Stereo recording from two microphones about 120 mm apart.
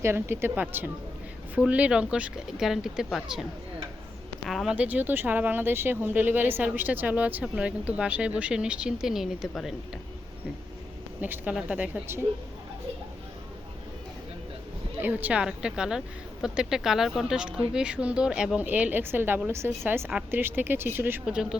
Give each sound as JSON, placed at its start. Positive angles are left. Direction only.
{"t": 0.0, "sound": "a woman's voice", "side_deg": -20}
{"t": 4.4, "sound": "a woman's voice", "side_deg": 0}
{"t": 4.7, "sound": "speech", "side_deg": -10}
{"t": 11.2, "sound": "speech", "side_deg": -15}
{"t": 15.0, "sound": "a woman's voice", "side_deg": -10}